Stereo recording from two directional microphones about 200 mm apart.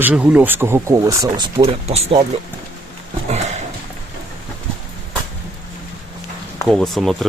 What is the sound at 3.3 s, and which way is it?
Horse, 35° right (ahead or behind).